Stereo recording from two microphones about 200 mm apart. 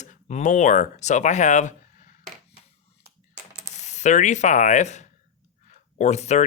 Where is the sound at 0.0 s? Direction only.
35° left (ahead or behind).